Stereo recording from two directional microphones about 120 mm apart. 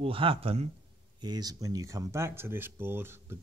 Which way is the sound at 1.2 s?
35° right (ahead or behind).